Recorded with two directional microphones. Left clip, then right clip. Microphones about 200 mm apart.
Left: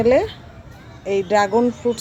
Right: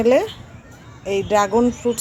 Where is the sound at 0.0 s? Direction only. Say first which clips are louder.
Even; centre (ahead or behind).